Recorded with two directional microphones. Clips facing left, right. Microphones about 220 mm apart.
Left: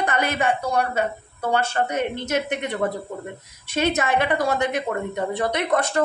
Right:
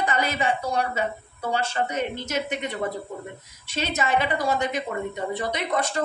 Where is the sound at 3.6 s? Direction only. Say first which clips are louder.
Left 5 dB; 55° left (ahead or behind).